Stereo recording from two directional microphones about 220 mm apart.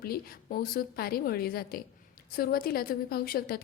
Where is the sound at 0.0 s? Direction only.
45° left (ahead or behind).